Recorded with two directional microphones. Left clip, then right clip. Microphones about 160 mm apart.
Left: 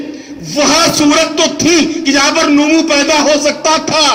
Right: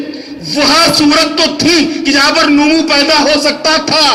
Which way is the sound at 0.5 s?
20° right (ahead or behind).